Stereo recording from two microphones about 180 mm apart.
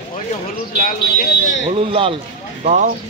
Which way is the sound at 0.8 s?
55° left (ahead or behind).